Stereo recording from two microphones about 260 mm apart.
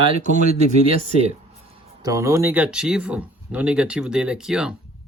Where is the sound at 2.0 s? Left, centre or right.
Centre.